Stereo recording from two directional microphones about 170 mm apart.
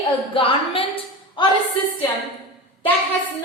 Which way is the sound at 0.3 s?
30° left (ahead or behind).